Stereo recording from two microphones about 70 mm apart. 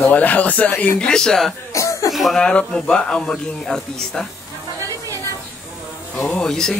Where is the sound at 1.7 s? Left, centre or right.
Left.